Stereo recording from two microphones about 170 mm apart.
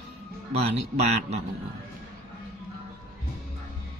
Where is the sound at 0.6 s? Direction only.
40° right (ahead or behind).